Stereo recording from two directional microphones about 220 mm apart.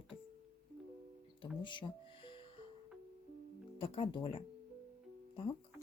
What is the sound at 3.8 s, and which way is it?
Speech, 25° left (ahead or behind).